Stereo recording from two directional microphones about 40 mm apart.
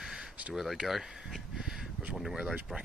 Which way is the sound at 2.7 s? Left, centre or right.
Centre.